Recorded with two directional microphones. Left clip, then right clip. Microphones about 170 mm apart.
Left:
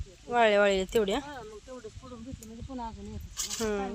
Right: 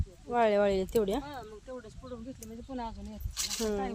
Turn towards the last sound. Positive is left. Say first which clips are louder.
# left 1 dB
turn(degrees=-5)  # may be behind; listen again after turning